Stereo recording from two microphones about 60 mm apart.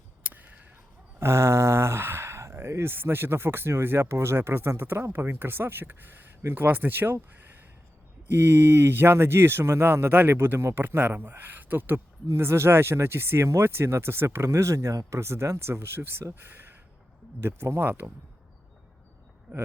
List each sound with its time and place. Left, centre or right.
1.2 s speech: right
8.4 s speech: right
10.1 s speech: right
10.3 s speech: right
12.3 s speech: right
17.8 s speech: right